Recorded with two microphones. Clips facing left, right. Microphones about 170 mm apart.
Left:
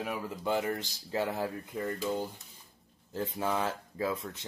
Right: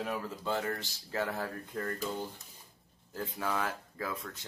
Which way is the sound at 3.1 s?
20° left (ahead or behind).